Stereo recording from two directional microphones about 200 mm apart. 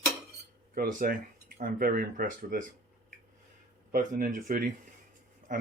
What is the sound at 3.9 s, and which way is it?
Speech, 45° right (ahead or behind).